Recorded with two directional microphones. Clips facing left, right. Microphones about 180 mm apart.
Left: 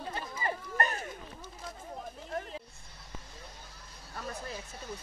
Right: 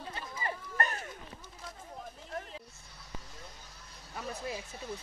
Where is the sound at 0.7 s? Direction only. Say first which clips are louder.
Left 2 dB; 20° left (ahead or behind).